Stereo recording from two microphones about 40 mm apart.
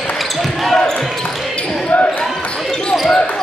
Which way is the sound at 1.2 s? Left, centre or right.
Left.